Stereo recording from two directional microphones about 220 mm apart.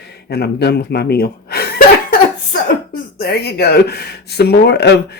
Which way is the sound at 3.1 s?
45° left (ahead or behind).